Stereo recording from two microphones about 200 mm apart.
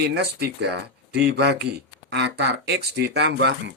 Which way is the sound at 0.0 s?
55° right (ahead or behind).